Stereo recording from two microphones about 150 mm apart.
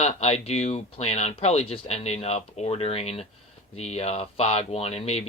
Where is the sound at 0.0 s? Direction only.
45° left (ahead or behind).